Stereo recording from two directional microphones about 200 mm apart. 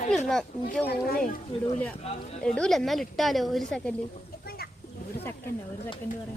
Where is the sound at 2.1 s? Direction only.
30° left (ahead or behind).